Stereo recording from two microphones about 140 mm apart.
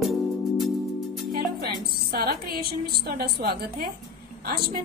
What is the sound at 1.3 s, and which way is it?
A woman's voice, 90° right.